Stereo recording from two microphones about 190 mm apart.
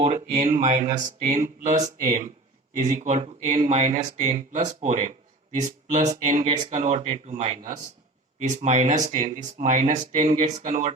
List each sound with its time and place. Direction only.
0.0 s speech: 40° right (ahead or behind)